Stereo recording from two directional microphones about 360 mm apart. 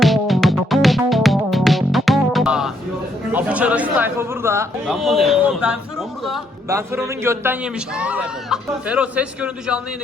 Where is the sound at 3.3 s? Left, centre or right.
Centre.